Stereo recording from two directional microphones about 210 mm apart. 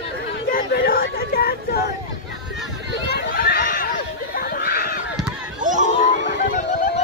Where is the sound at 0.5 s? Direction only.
45° left (ahead or behind).